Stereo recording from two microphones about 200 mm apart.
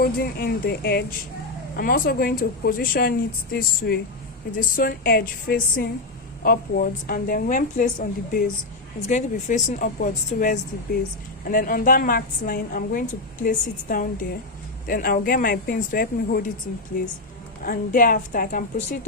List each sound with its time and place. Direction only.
0.0 s a woman's voice: 50° left (ahead or behind)